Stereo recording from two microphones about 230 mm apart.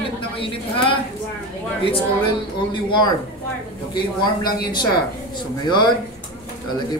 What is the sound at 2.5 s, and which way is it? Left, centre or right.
A man's voice, centre.